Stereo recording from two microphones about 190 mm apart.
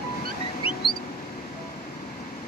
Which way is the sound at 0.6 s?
30° left (ahead or behind).